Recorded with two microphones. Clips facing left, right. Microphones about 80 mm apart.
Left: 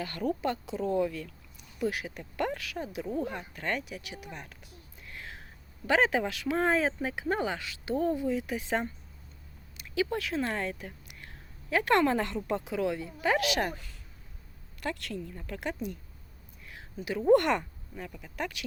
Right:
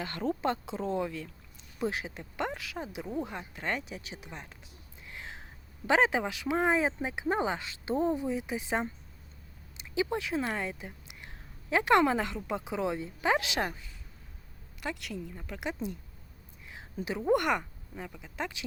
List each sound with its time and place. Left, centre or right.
0.0 s speech: right
5.0 s a sound: right
5.9 s speech: centre
13.7 s speech: left
14.8 s speech: centre
17.1 s speech: centre